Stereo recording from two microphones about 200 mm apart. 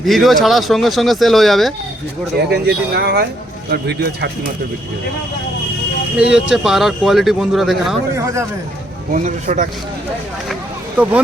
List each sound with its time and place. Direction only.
0.0 s speech: centre (ahead or behind)
2.4 s a man's voice: 55° right (ahead or behind)
6.1 s speech: 5° right (ahead or behind)
8.1 s speech: 15° right (ahead or behind)
9.1 s speech: 40° right (ahead or behind)
10.5 s a sound: 5° right (ahead or behind)